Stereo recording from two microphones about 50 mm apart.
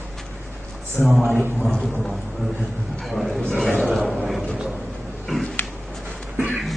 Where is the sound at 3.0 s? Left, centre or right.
Centre.